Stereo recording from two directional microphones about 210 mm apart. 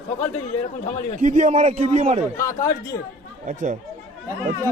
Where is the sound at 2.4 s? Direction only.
15° left (ahead or behind).